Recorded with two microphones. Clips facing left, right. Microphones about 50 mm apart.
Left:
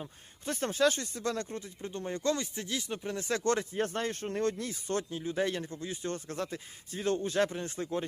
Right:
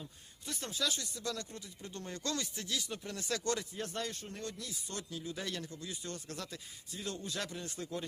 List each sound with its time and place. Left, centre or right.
0.0 s speech: left